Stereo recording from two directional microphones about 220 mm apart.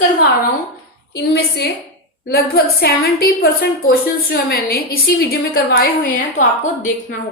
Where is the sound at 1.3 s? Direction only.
50° left (ahead or behind).